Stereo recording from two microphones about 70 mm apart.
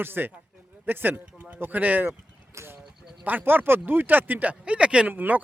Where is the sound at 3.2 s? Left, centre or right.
Right.